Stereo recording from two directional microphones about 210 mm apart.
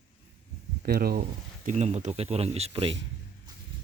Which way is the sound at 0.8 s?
45° right (ahead or behind).